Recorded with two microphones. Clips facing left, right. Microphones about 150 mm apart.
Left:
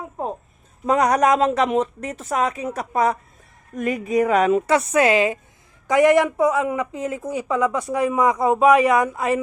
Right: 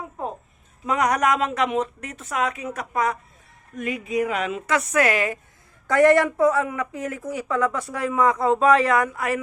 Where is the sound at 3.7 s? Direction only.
45° left (ahead or behind); by 9.3 s 20° left (ahead or behind).